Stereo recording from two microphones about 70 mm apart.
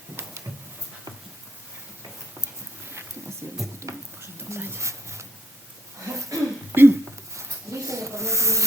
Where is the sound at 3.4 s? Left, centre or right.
Right.